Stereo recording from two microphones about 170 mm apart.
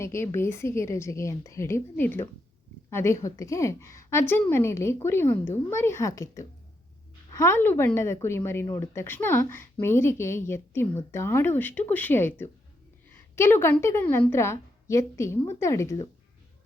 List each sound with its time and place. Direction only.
0.0 s a woman's voice: 15° left (ahead or behind)